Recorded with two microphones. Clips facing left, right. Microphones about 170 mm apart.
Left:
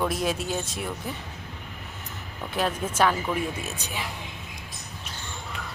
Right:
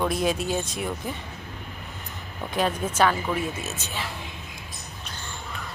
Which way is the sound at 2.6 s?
5° left (ahead or behind).